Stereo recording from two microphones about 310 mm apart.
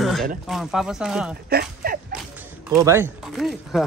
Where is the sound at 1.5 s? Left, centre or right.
Right.